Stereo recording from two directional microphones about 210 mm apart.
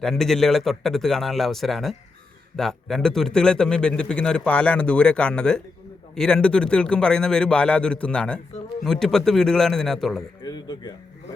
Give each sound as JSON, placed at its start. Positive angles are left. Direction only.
{"t": 0.0, "sound": "a man's voice", "side_deg": 0}
{"t": 10.4, "sound": "speech", "side_deg": 20}